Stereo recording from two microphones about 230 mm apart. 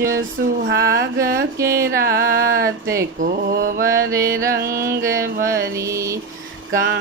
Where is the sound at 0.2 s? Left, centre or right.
Right.